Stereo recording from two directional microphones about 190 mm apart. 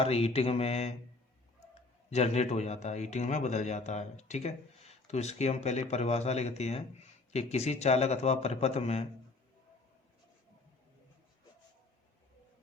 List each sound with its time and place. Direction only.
0.0 s a man's voice: 30° left (ahead or behind)
2.0 s a man's voice: 35° left (ahead or behind)